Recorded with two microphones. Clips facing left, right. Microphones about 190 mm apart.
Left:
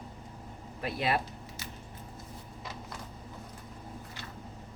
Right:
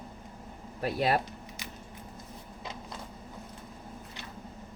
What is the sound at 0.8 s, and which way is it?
Speech, 40° right (ahead or behind).